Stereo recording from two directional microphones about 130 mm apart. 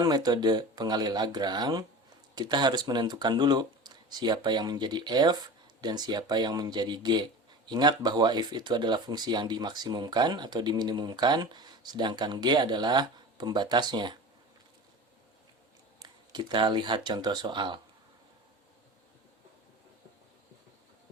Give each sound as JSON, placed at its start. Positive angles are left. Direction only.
{"t": 0.0, "sound": "speech", "side_deg": -30}
{"t": 16.0, "sound": "speech", "side_deg": -35}